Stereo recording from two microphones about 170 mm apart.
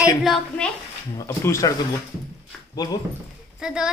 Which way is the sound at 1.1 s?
15° left (ahead or behind).